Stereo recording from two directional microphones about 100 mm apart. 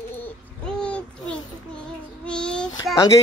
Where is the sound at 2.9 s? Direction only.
30° left (ahead or behind).